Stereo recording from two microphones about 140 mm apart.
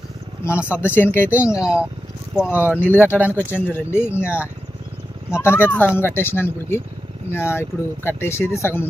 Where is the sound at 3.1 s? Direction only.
5° left (ahead or behind).